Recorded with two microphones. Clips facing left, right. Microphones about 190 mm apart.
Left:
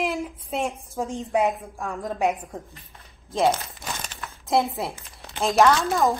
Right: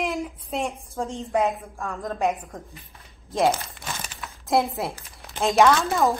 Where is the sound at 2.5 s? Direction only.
Centre (ahead or behind).